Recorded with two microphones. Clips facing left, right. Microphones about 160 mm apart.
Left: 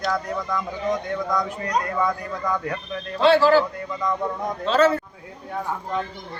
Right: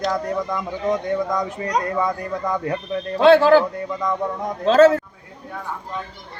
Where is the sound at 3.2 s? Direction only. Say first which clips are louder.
Right 4 dB; 55° right (ahead or behind).